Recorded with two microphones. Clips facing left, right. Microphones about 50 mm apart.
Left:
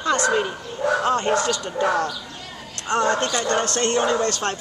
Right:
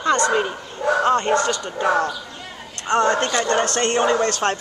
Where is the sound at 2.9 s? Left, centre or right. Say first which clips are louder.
Right 3 dB; centre.